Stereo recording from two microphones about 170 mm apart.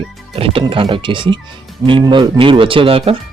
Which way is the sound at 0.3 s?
35° right (ahead or behind).